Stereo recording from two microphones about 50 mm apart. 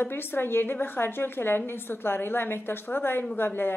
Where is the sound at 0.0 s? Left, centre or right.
Left.